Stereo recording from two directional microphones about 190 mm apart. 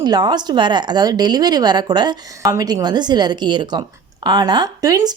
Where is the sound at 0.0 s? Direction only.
20° right (ahead or behind).